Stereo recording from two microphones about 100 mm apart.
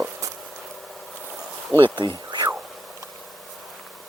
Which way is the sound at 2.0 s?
55° right (ahead or behind).